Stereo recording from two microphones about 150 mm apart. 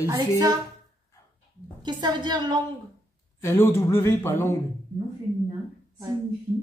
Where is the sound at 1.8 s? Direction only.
30° right (ahead or behind).